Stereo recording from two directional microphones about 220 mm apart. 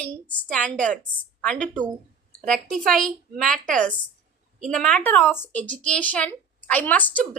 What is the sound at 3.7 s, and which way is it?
Speech, 35° right (ahead or behind).